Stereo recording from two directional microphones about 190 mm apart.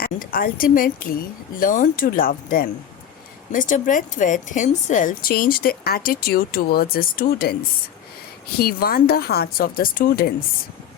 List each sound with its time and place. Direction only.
0.0 s a woman's voice: 50° left (ahead or behind)
8.5 s a woman's voice: 55° left (ahead or behind)